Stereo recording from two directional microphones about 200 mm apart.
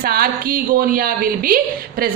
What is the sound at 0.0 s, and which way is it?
A woman's voice, 45° right (ahead or behind).